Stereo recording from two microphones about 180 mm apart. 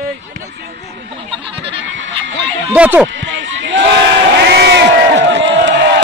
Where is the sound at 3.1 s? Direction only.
90° right.